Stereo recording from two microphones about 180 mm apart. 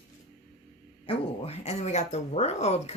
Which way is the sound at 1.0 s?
30° left (ahead or behind).